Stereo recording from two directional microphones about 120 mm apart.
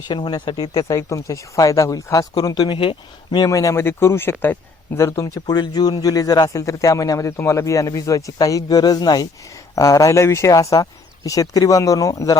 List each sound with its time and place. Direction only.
0.1 s speech: 40° left (ahead or behind)
3.3 s speech: 30° left (ahead or behind)